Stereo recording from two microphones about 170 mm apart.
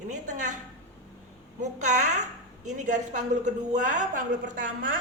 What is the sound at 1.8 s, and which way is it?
A woman's voice, 45° right (ahead or behind).